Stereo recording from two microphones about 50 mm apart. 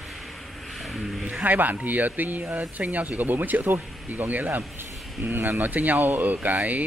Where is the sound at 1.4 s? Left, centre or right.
Right.